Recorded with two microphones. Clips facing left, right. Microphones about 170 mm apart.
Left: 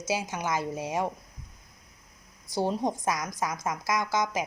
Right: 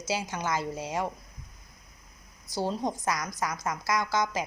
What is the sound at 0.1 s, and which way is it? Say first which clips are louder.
A woman's voice: left 1 dB; 15° left (ahead or behind).